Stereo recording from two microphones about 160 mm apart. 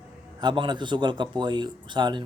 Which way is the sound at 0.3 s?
30° right (ahead or behind).